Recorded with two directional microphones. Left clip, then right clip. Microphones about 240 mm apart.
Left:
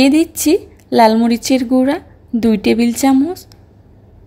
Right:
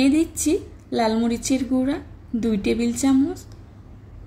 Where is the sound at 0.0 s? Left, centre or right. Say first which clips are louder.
Left 8 dB; left.